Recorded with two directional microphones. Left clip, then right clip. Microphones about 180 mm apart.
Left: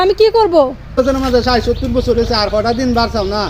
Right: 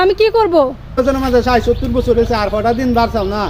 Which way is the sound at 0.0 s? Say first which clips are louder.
Left 1 dB; 20° left (ahead or behind).